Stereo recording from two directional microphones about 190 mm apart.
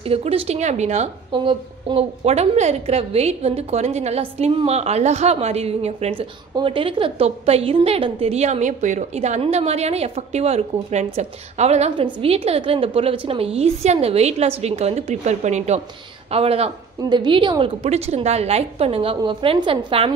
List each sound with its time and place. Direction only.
0.0 s a woman's voice: 30° right (ahead or behind)